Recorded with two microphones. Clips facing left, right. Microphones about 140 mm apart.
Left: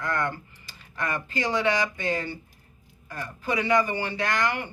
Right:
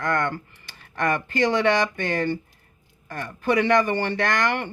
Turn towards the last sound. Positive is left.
turn(degrees=-70)  # may be behind; listen again after turning